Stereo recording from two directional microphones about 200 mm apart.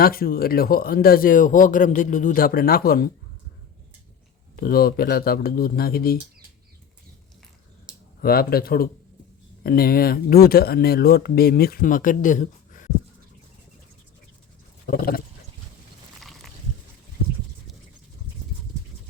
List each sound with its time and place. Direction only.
0.0 s speech: 45° left (ahead or behind)
4.5 s speech: 50° left (ahead or behind)
8.2 s speech: 50° left (ahead or behind)
14.8 s speech: 45° left (ahead or behind)
16.2 s a sound: centre (ahead or behind)